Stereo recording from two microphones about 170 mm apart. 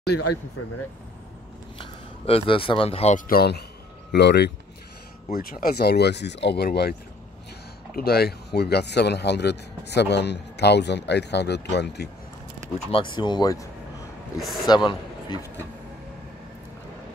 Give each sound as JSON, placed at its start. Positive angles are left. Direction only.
{"t": 1.8, "sound": "speech", "side_deg": 30}
{"t": 3.3, "sound": "speech", "side_deg": 65}
{"t": 4.1, "sound": "speech", "side_deg": 85}
{"t": 5.3, "sound": "speech", "side_deg": 60}
{"t": 12.7, "sound": "a man's voice", "side_deg": 30}